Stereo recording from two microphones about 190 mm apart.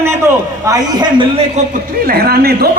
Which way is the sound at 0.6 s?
20° right (ahead or behind).